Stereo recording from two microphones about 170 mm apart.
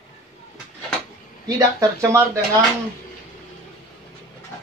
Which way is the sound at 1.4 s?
20° right (ahead or behind).